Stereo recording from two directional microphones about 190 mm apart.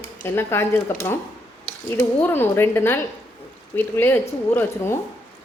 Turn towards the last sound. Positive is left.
turn(degrees=10)  # may be behind; listen again after turning